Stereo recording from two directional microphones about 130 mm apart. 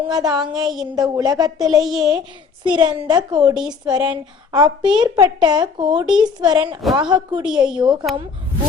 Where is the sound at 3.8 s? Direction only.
30° right (ahead or behind).